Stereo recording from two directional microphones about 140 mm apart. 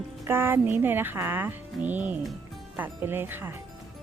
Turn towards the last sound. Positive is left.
turn(degrees=-15)  # may be behind; listen again after turning